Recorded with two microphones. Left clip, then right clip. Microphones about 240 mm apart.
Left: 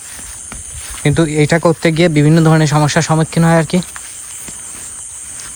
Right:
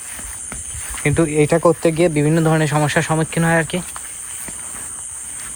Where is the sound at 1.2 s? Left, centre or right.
Left.